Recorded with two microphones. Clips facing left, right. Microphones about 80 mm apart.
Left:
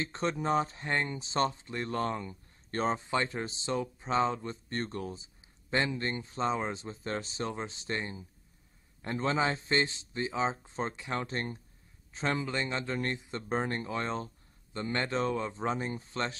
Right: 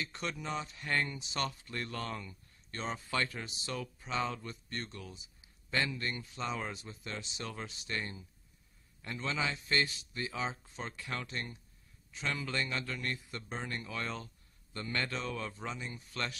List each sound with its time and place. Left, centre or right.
0.0 s speech: left
3.0 s speech: left
9.0 s speech: left
13.5 s speech: left